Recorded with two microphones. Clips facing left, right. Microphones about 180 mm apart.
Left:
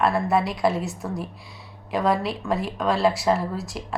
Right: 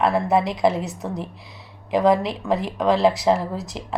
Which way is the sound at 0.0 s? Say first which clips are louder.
Right 2 dB; 20° right (ahead or behind).